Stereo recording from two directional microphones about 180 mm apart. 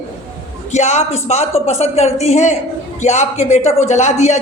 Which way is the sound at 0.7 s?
40° left (ahead or behind).